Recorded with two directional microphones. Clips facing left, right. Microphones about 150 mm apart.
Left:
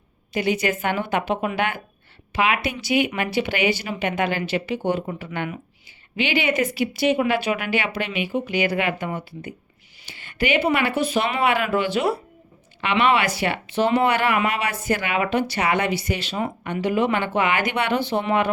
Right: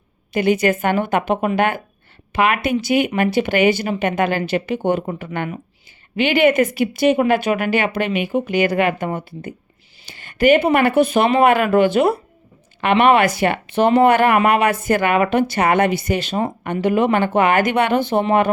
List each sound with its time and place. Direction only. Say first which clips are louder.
0.3 s speech: right 6 dB; 50° right (ahead or behind)